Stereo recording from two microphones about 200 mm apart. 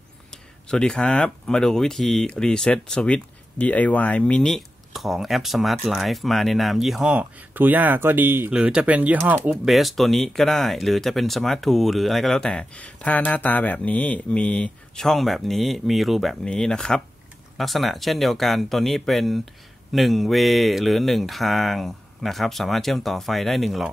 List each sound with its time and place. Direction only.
0.3 s speech: 5° left (ahead or behind)